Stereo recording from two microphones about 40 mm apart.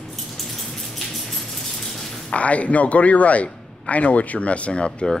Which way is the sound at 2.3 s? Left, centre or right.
Left.